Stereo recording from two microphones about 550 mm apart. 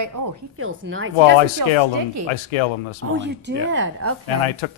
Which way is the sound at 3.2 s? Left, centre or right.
Centre.